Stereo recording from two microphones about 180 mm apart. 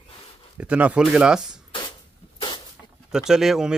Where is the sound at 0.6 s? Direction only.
5° right (ahead or behind).